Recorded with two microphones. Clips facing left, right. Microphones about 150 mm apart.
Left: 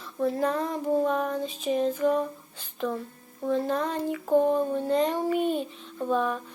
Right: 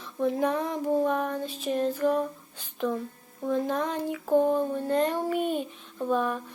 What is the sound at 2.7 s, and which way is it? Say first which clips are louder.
Speech: right 1 dB; centre (ahead or behind).